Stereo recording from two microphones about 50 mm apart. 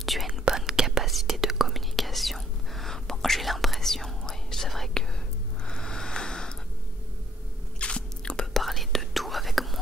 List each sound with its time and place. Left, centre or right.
0.0 s whispering: centre
5.7 s a sound: centre
7.8 s biting: centre
8.5 s whispering: centre